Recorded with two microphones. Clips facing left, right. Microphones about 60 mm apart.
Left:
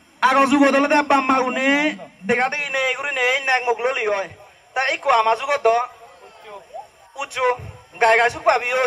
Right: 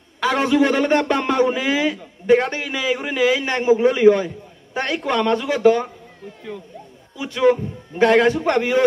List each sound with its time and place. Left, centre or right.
0.2 s a man's voice: left
7.2 s a man's voice: left